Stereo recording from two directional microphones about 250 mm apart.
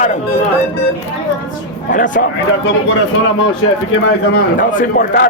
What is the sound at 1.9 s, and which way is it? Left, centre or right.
Speech, left.